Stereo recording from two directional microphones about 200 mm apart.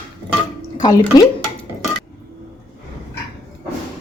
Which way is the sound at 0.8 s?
20° left (ahead or behind).